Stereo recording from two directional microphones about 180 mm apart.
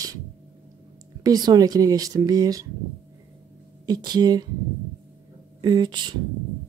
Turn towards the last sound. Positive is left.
turn(degrees=-25)  # may be behind; listen again after turning